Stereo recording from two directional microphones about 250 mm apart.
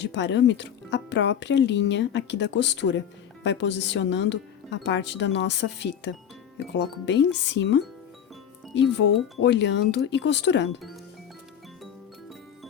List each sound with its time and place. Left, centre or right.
0.0 s speech: left